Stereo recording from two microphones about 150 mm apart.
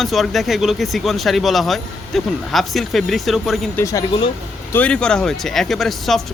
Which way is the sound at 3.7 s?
20° left (ahead or behind).